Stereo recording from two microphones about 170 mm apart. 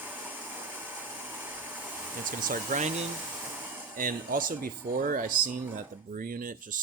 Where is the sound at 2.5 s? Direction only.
50° right (ahead or behind).